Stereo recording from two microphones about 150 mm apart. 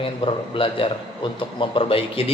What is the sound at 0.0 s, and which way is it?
A man's voice, 35° left (ahead or behind).